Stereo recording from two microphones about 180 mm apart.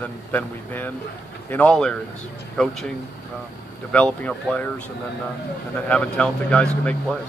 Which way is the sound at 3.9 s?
5° left (ahead or behind).